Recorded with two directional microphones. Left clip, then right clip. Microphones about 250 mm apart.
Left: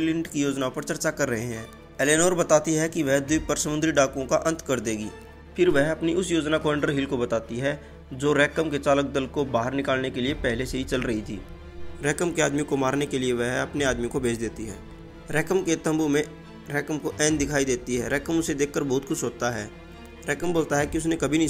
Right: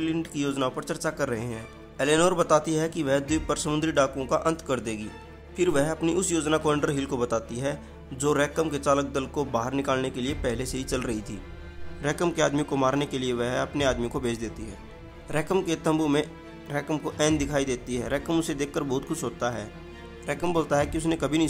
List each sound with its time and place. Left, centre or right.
0.0 s speech: centre